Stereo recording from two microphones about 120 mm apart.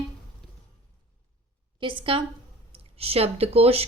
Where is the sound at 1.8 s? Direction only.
45° right (ahead or behind).